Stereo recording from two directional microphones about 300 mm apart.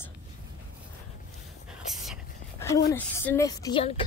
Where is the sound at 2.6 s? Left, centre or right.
Centre.